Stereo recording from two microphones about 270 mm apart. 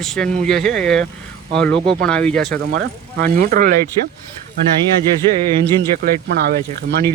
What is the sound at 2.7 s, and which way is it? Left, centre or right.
Speech, right.